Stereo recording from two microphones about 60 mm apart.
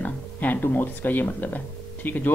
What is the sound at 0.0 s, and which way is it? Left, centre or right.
Speech, left.